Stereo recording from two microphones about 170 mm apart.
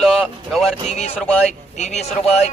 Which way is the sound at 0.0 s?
Centre (ahead or behind).